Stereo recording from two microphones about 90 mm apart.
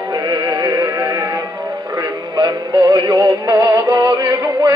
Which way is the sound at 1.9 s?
45° right (ahead or behind).